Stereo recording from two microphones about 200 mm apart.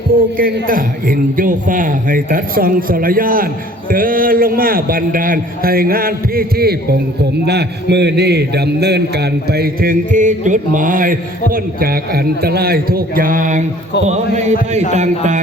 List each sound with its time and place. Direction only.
0.3 s a man's voice: 45° right (ahead or behind)